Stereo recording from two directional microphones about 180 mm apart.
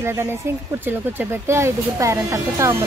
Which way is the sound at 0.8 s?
15° right (ahead or behind).